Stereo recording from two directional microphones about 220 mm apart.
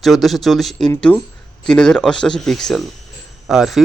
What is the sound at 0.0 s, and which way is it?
Speech, centre (ahead or behind).